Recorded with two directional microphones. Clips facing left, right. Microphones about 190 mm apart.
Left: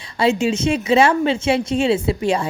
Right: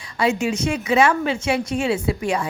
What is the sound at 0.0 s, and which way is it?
A woman's voice, 25° left (ahead or behind).